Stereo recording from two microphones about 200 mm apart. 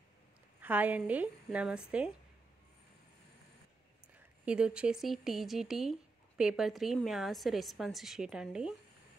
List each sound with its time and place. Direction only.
0.6 s a woman's voice: 10° right (ahead or behind)
4.5 s speech: 5° right (ahead or behind)